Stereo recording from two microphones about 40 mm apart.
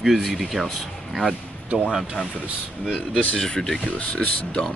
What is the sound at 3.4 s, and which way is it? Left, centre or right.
Speech, centre.